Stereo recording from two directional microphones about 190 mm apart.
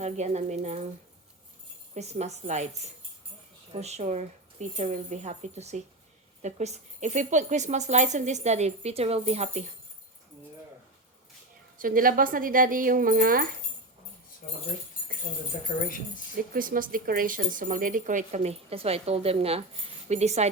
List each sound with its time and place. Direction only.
0.0 s speech: 35° right (ahead or behind)
2.0 s speech: 35° right (ahead or behind)
11.8 s speech: 50° right (ahead or behind)
16.6 s speech: 45° right (ahead or behind)